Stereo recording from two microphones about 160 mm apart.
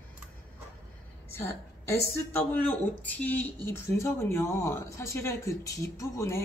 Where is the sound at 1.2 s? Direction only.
15° left (ahead or behind).